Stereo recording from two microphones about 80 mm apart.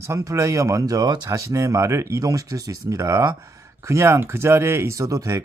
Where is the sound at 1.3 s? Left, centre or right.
Right.